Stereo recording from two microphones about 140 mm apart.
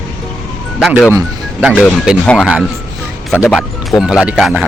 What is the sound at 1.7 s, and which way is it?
Speech, 10° left (ahead or behind).